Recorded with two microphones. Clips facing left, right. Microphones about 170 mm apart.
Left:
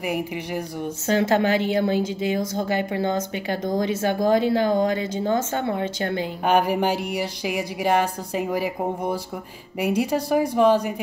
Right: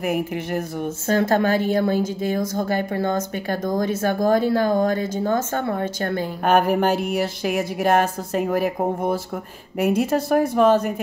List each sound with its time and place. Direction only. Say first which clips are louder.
0.0 s speech: right 3 dB; 10° left (ahead or behind)
1.0 s speech: right 1 dB; 50° right (ahead or behind)
6.5 s speech: right 3 dB; 10° left (ahead or behind)
9.8 s speech: right 3 dB; 10° left (ahead or behind)